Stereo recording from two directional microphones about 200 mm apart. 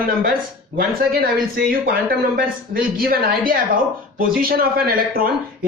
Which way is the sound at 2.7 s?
45° right (ahead or behind).